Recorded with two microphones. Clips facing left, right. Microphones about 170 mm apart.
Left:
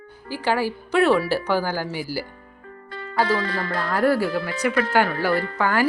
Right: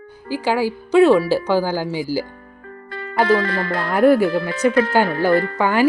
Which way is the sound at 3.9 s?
20° right (ahead or behind).